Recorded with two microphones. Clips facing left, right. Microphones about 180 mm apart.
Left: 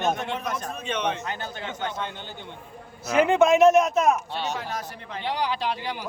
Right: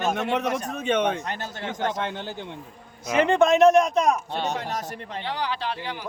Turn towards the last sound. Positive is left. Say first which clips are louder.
# left 2 dB
turn(degrees=15)  # may be behind; listen again after turning